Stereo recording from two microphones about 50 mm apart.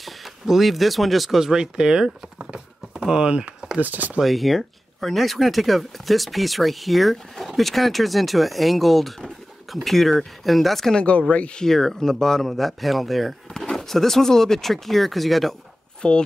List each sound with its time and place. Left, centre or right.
0.0 s speech: centre
2.5 s a sound: centre
3.8 s speech: right
4.2 s speech: centre
11.0 s speech: left
11.6 s speech: centre
16.0 s speech: centre